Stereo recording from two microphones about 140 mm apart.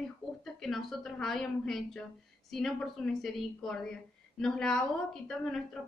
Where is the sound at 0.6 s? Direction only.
Centre (ahead or behind).